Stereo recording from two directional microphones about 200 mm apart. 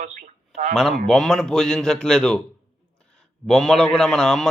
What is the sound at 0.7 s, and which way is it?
A man's voice, centre (ahead or behind).